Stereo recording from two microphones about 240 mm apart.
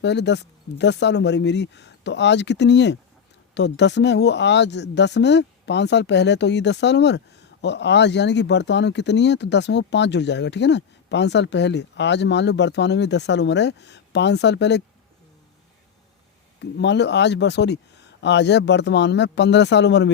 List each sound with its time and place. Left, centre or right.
0.0 s speech: left
16.6 s speech: left